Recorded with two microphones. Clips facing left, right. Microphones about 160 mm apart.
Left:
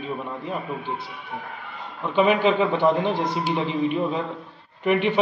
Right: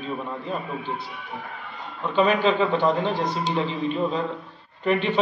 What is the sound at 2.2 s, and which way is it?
A man's voice, 20° left (ahead or behind).